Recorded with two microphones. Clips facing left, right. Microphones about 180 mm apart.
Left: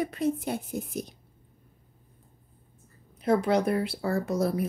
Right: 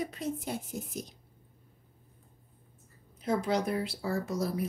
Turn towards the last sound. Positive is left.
turn(degrees=55)  # may be behind; listen again after turning